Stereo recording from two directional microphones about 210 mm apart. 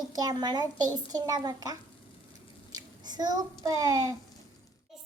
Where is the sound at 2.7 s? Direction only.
20° right (ahead or behind).